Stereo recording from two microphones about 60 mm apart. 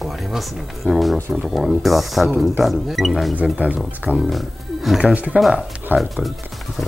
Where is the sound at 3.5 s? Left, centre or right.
Right.